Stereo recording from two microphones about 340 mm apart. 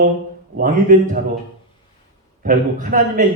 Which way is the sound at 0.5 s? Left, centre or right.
Right.